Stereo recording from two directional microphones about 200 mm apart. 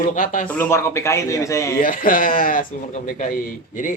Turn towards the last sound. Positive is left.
turn(degrees=40)  # may be behind; listen again after turning